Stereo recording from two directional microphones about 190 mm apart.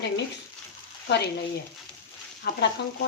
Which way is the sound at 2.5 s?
55° left (ahead or behind).